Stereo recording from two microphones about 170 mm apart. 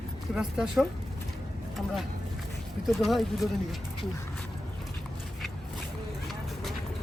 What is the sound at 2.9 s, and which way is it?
Speech, centre (ahead or behind).